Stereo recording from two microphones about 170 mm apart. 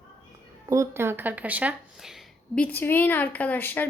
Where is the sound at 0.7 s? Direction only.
15° right (ahead or behind).